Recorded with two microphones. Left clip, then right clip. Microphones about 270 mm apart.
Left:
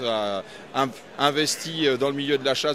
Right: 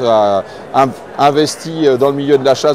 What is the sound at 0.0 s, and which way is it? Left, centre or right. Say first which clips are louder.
Speech: right 15 dB; centre.